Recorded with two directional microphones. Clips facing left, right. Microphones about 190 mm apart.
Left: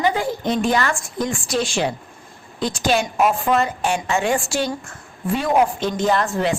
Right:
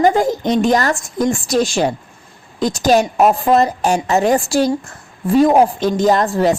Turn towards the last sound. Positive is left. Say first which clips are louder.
# right 5 dB
turn(degrees=-40)  # may be behind; listen again after turning